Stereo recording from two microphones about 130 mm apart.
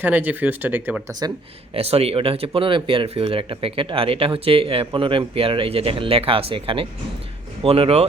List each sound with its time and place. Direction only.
0.0 s speech: 15° right (ahead or behind)
1.7 s speech: 50° right (ahead or behind)